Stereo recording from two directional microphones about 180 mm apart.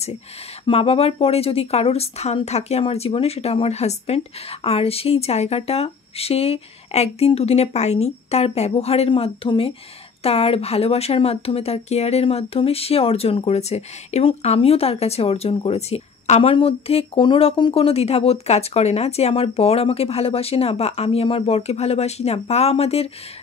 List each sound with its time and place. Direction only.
0.7 s speech: 35° left (ahead or behind)